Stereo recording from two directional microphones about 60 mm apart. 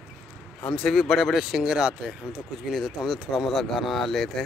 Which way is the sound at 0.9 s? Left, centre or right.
Centre.